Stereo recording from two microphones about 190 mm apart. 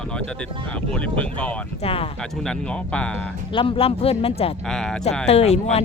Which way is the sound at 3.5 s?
25° left (ahead or behind).